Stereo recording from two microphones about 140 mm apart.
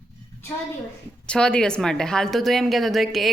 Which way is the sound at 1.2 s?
5° left (ahead or behind).